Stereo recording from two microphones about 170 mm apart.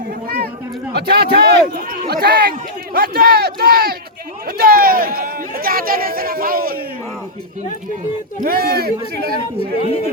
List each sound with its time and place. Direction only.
0.9 s a man's voice: 75° right (ahead or behind)
8.4 s a man's voice: 65° right (ahead or behind)